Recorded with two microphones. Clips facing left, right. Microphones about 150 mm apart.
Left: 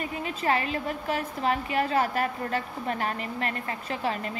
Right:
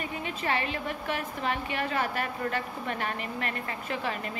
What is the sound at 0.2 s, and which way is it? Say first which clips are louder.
A woman's voice: left 4 dB; 40° left (ahead or behind).